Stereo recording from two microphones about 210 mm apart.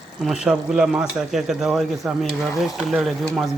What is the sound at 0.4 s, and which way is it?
A man's voice, 5° right (ahead or behind).